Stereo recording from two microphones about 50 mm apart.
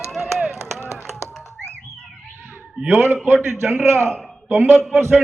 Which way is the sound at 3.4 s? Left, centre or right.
Right.